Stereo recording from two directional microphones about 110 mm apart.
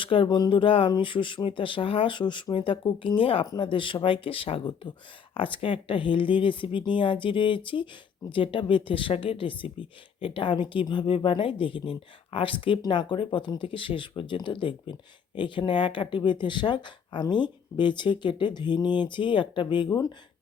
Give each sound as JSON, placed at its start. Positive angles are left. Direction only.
{"t": 0.0, "sound": "speech", "side_deg": 50}